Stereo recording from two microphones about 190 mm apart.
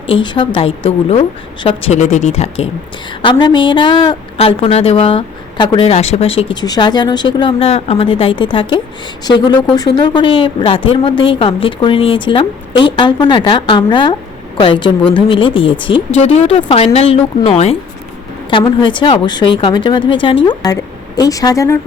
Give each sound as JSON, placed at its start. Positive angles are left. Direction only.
{"t": 0.1, "sound": "a woman's voice", "side_deg": 25}